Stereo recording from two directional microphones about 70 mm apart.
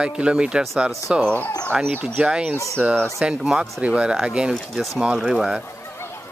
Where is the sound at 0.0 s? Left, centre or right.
Centre.